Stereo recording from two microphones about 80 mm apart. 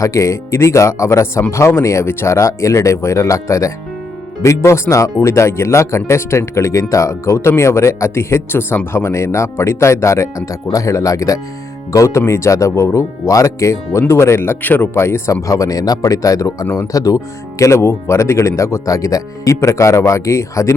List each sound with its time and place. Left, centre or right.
0.0 s speech: left